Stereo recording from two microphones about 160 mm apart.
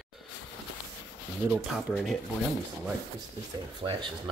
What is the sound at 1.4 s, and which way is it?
Speech, centre (ahead or behind).